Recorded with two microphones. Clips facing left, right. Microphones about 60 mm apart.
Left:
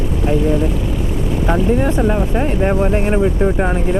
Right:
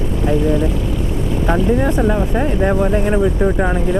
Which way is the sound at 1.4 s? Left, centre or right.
Centre.